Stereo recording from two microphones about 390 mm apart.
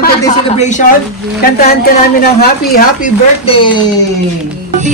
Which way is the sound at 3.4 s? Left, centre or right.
Centre.